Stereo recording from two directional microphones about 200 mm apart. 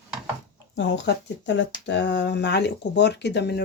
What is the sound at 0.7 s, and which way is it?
Speech, 60° left (ahead or behind).